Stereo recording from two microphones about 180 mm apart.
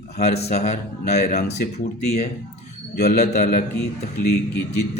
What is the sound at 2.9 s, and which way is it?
Speech, 60° left (ahead or behind).